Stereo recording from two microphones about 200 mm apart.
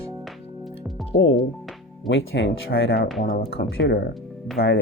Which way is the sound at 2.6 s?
50° left (ahead or behind).